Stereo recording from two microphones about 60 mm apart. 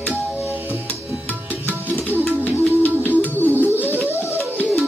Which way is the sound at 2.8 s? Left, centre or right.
Left.